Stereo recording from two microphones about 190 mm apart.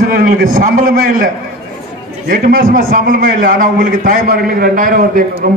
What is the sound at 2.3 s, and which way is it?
A man's voice, 50° right (ahead or behind).